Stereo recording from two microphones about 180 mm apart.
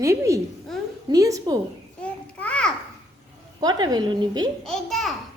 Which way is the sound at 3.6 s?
20° right (ahead or behind).